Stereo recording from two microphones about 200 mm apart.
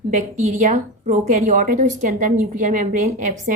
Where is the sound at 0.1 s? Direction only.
40° right (ahead or behind).